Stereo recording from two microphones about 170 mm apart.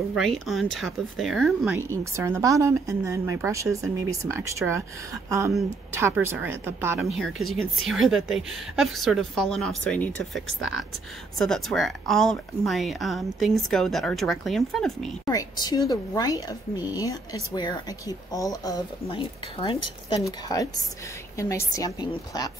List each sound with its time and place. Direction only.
0.1 s a woman's voice: centre (ahead or behind)
1.8 s speech: 15° right (ahead or behind)
7.2 s a woman's voice: centre (ahead or behind)
15.2 s a woman's voice: 25° left (ahead or behind)
19.0 s a woman's voice: 30° left (ahead or behind)
20.2 s a woman's voice: 20° left (ahead or behind)